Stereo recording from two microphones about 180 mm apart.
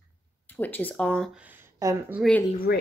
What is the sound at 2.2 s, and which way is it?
Speech, 10° left (ahead or behind).